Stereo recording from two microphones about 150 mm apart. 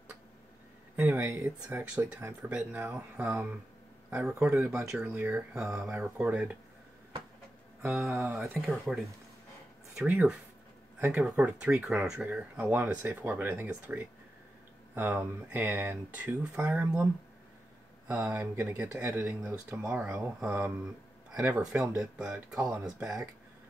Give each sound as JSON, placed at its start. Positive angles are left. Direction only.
{"t": 0.9, "sound": "speech", "side_deg": -10}
{"t": 8.0, "sound": "speech", "side_deg": -15}
{"t": 8.5, "sound": "speech", "side_deg": 0}
{"t": 11.0, "sound": "speech", "side_deg": -15}
{"t": 20.8, "sound": "a sound", "side_deg": -5}
{"t": 21.5, "sound": "speech", "side_deg": -5}